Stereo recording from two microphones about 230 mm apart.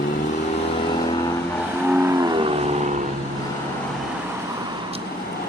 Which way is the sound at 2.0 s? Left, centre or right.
Centre.